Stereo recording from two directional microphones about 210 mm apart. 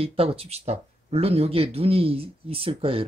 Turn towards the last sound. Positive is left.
turn(degrees=-25)  # may be behind; listen again after turning